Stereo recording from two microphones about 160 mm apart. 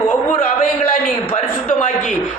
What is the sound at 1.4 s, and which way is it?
Speech, 50° left (ahead or behind).